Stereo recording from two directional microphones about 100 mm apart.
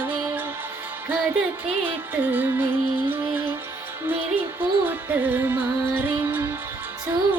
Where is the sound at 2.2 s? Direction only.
20° right (ahead or behind).